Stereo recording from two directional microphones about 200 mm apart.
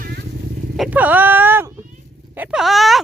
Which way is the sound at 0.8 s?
5° right (ahead or behind).